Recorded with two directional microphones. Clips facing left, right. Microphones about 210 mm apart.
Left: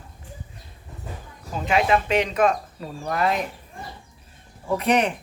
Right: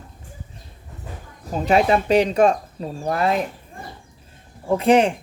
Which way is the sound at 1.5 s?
35° right (ahead or behind).